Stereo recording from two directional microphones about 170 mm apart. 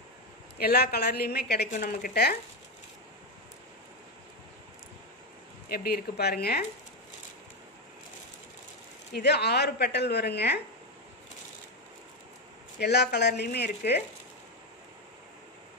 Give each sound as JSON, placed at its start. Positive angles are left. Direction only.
{"t": 0.6, "sound": "a woman's voice", "side_deg": 70}
{"t": 1.7, "sound": "a woman's voice", "side_deg": 60}
{"t": 5.7, "sound": "a woman's voice", "side_deg": 65}
{"t": 9.1, "sound": "a woman's voice", "side_deg": 75}
{"t": 12.8, "sound": "a woman's voice", "side_deg": 75}